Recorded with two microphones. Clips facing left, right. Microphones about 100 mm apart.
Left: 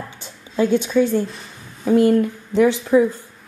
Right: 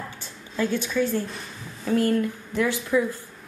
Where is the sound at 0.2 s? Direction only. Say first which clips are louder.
Left 7 dB; 20° left (ahead or behind).